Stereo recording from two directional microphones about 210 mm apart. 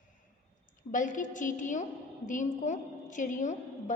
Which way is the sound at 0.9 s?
40° left (ahead or behind).